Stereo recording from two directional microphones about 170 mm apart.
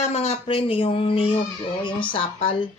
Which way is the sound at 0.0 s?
40° left (ahead or behind).